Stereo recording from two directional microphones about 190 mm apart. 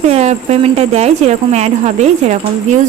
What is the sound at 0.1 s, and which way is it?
Speech, 35° right (ahead or behind).